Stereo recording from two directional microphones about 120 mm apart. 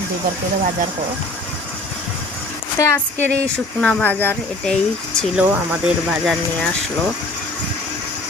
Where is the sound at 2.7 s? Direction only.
25° left (ahead or behind).